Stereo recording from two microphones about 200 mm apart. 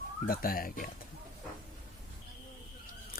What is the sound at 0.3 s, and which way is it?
Speech, 45° left (ahead or behind).